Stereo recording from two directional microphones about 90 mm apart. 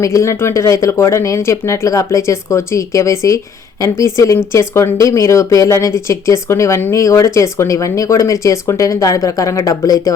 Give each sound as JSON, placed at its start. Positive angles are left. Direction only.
{"t": 0.0, "sound": "speech", "side_deg": 35}